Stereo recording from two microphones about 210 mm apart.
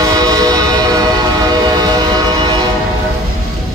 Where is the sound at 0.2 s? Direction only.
20° right (ahead or behind).